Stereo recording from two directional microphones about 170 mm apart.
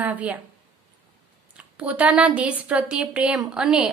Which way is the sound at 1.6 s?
5° right (ahead or behind).